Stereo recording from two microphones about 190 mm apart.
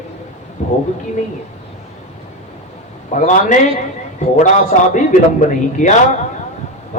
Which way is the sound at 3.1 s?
40° left (ahead or behind).